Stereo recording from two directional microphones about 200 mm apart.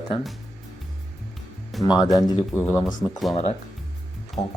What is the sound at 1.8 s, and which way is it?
Speech, 20° left (ahead or behind).